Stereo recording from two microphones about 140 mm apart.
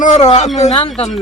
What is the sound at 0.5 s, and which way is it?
Speech, 45° left (ahead or behind).